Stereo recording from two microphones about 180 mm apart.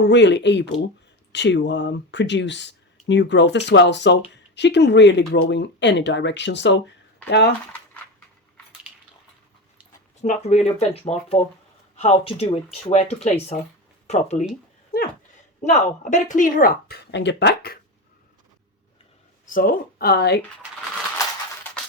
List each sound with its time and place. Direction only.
0.1 s speech: 75° left (ahead or behind)
10.2 s speech: 40° left (ahead or behind)
14.9 s a sound: 55° left (ahead or behind)
15.6 s speech: 40° left (ahead or behind); by 17.7 s 60° left (ahead or behind)
19.5 s speech: 50° left (ahead or behind)